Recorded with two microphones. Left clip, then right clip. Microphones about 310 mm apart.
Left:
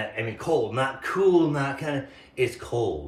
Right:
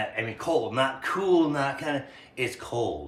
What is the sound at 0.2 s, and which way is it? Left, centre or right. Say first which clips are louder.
A man's voice: left 3 dB; centre.